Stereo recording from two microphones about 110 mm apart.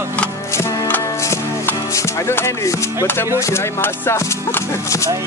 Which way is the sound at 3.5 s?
25° left (ahead or behind).